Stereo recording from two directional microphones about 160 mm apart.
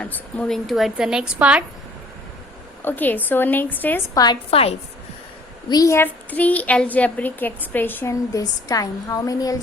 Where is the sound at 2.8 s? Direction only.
10° left (ahead or behind).